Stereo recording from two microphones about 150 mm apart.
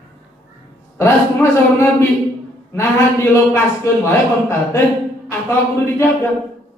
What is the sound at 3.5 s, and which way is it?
A woman's voice, 20° left (ahead or behind).